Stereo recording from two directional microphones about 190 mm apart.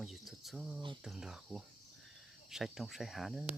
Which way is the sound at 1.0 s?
5° right (ahead or behind).